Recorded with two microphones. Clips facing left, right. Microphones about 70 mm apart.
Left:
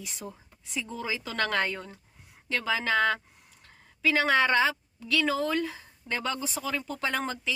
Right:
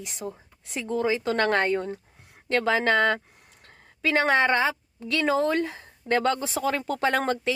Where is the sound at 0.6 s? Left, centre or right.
Right.